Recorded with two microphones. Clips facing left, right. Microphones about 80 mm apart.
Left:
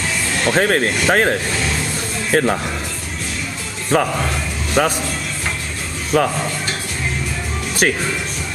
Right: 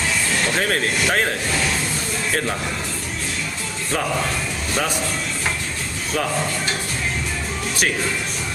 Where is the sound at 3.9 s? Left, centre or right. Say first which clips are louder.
Left 5 dB; left.